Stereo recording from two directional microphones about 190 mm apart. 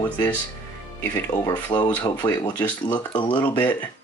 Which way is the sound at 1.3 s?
25° left (ahead or behind).